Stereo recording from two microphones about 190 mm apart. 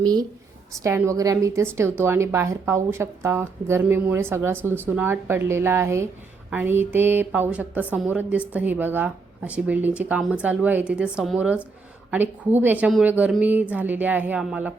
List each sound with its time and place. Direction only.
0.0 s a woman's voice: 20° right (ahead or behind)